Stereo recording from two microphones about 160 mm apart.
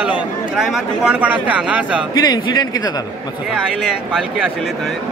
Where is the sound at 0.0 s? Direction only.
5° right (ahead or behind).